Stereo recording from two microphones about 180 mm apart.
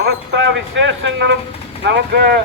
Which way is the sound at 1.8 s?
70° right (ahead or behind).